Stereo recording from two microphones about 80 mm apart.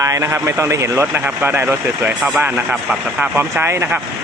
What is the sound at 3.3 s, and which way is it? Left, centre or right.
Speech, right.